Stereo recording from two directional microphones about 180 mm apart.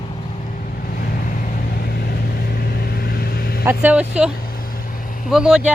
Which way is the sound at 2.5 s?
60° left (ahead or behind).